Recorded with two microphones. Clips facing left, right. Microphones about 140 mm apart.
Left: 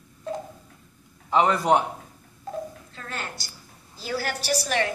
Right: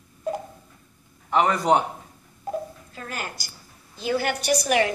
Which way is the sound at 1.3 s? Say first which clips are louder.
Even; 5° left (ahead or behind).